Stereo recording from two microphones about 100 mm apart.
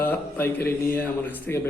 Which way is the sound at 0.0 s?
20° left (ahead or behind).